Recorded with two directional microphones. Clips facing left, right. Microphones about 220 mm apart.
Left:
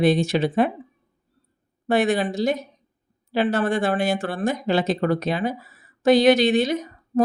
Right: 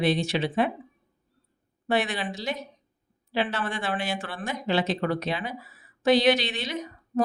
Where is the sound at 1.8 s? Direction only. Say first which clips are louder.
Left 7 dB; 45° left (ahead or behind).